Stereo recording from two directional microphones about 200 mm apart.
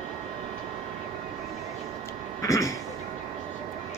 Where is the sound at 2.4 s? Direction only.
15° left (ahead or behind).